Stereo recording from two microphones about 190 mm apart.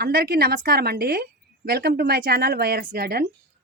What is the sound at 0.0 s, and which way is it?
A woman's voice, 55° right (ahead or behind).